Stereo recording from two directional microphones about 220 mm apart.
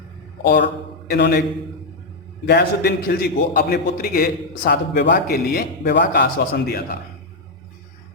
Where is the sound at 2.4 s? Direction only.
50° left (ahead or behind).